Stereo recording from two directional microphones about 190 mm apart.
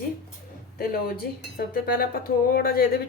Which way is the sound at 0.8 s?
50° left (ahead or behind).